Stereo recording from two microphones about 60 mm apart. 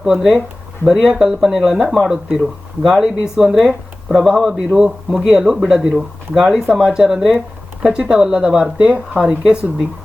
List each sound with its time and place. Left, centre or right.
0.0 s speech: centre